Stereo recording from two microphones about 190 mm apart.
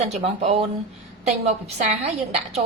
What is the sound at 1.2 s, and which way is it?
Speech, 35° right (ahead or behind).